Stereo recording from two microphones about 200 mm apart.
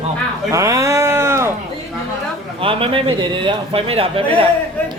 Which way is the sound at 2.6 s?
25° right (ahead or behind).